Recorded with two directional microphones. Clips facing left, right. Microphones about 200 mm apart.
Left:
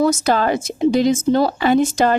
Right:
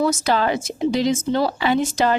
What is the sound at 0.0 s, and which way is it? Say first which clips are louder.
Speech: left 3 dB; 45° left (ahead or behind).